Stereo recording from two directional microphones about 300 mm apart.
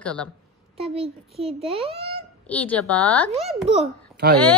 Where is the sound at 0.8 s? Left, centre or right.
Centre.